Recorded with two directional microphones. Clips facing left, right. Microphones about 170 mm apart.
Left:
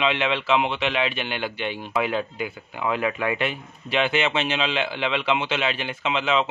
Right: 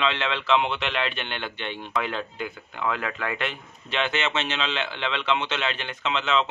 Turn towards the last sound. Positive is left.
turn(degrees=10)  # may be behind; listen again after turning